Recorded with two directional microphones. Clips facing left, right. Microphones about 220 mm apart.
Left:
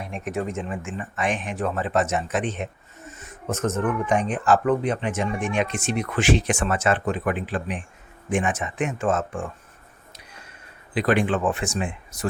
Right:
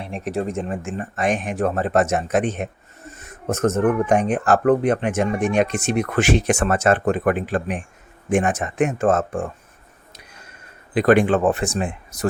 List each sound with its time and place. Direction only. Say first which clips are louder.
0.0 s speech: right 3 dB; 35° right (ahead or behind)
10.9 s speech: right 6 dB; 45° right (ahead or behind)